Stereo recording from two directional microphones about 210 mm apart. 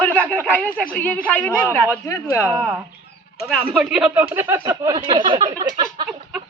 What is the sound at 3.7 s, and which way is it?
Speech, 5° right (ahead or behind).